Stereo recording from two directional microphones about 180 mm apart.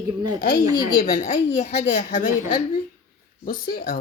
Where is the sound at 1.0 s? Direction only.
45° left (ahead or behind).